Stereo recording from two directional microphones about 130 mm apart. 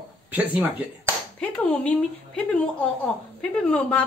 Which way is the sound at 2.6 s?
10° left (ahead or behind).